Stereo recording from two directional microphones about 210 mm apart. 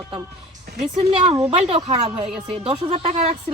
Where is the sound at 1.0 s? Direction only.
20° right (ahead or behind).